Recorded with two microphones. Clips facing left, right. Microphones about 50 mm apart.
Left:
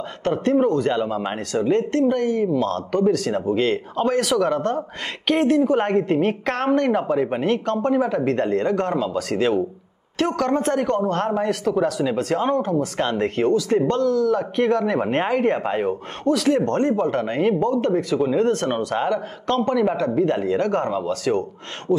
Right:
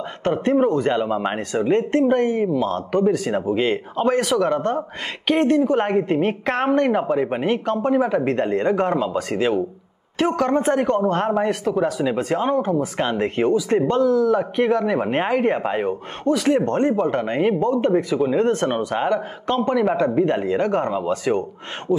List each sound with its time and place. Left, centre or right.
0.2 s a man's voice: centre
2.5 s a man's voice: centre